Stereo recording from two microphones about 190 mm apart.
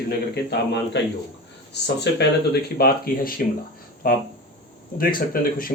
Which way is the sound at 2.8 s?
50° left (ahead or behind).